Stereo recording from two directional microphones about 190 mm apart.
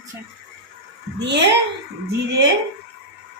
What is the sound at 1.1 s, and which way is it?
Speech, 60° right (ahead or behind).